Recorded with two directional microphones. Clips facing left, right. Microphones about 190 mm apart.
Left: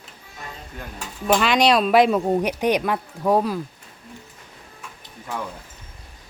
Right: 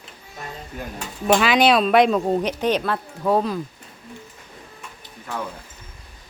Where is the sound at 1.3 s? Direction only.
5° right (ahead or behind).